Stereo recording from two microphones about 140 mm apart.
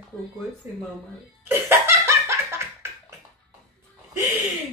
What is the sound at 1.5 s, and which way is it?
Laughter, 15° right (ahead or behind).